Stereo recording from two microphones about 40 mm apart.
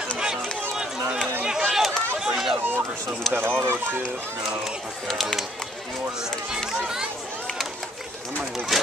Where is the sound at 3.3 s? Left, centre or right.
Right.